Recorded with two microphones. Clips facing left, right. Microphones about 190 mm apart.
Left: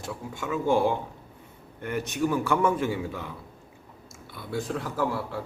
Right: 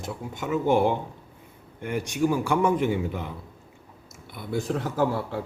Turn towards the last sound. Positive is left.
turn(degrees=-25)  # may be behind; listen again after turning